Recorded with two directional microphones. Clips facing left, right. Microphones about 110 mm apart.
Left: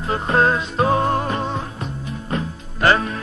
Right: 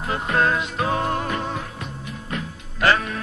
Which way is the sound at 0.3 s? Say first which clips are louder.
Left 3 dB; 30° left (ahead or behind).